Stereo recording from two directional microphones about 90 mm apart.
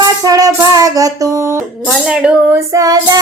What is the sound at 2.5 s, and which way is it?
Child singing, 40° right (ahead or behind).